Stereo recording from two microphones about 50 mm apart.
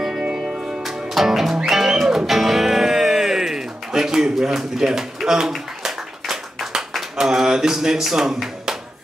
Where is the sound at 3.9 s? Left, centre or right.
Centre.